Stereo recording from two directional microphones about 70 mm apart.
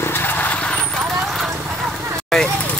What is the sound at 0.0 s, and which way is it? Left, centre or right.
Vehicle, left.